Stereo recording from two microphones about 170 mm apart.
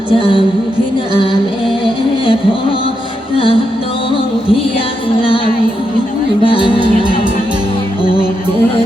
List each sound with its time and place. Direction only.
0.1 s music: 30° left (ahead or behind)
3.3 s music: 30° left (ahead or behind)
6.4 s music: 30° left (ahead or behind)